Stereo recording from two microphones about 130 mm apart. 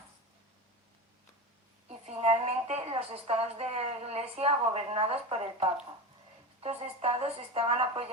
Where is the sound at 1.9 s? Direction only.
55° right (ahead or behind).